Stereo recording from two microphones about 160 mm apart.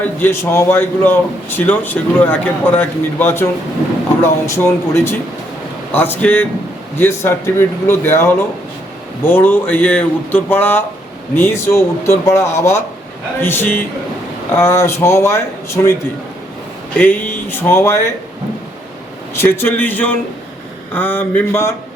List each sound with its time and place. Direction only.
0.0 s a man's voice: 15° left (ahead or behind)
17.0 s a man's voice: 10° left (ahead or behind)
19.3 s a man's voice: 15° left (ahead or behind)